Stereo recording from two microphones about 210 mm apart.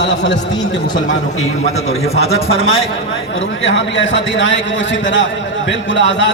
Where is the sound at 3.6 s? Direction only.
60° left (ahead or behind).